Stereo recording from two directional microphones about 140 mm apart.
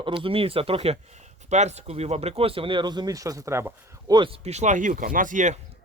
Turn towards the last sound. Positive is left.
turn(degrees=-60)  # may be behind; listen again after turning